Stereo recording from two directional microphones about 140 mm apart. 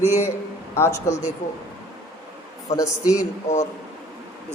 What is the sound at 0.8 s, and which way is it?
Speech, 20° left (ahead or behind).